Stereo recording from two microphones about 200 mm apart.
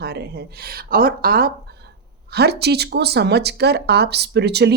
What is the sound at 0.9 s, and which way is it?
Speech, 45° right (ahead or behind).